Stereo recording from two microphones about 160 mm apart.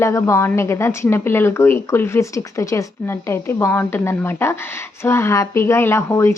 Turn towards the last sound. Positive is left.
turn(degrees=15)  # may be behind; listen again after turning